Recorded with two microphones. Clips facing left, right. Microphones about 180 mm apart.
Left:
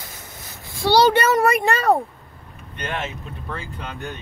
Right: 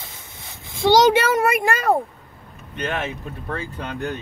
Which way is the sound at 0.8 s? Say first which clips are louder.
Right 1 dB; 15° right (ahead or behind).